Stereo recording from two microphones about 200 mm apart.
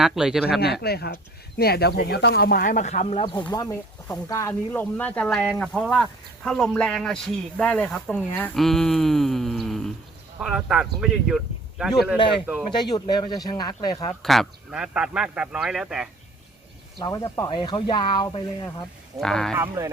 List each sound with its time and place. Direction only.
0.0 s speech: centre (ahead or behind)
0.6 s speech: 55° left (ahead or behind); by 12.6 s 5° right (ahead or behind)
12.8 s speech: 20° left (ahead or behind)
14.2 s speech: centre (ahead or behind)
17.0 s speech: 15° left (ahead or behind)
19.2 s speech: 5° left (ahead or behind)
19.5 s speech: 15° right (ahead or behind)